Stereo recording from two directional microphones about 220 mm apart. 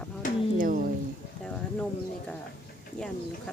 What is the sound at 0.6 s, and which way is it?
Speech, 40° right (ahead or behind).